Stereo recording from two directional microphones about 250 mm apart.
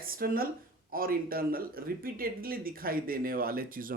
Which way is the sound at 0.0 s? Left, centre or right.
Right.